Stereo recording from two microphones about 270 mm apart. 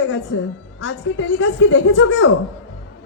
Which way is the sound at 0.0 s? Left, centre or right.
Left.